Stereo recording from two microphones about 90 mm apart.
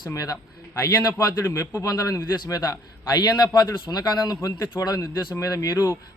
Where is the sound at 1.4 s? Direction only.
25° left (ahead or behind).